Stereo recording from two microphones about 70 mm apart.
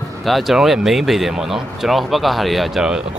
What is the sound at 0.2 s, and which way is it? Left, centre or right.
Speech, centre.